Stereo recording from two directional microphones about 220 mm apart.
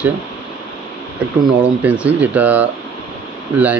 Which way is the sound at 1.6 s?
5° right (ahead or behind).